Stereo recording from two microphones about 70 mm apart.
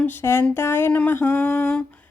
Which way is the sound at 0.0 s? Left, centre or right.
Left.